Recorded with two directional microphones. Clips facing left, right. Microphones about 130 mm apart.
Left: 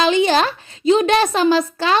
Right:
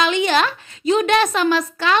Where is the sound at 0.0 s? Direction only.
30° left (ahead or behind).